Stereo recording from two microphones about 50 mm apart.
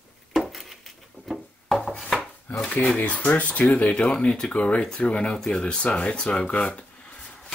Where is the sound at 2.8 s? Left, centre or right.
Left.